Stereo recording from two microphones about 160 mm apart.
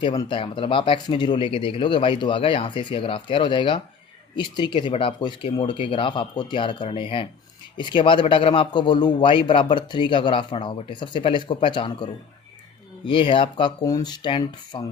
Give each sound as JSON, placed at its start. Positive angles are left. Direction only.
{"t": 0.2, "sound": "speech", "side_deg": 30}
{"t": 13.1, "sound": "speech", "side_deg": 30}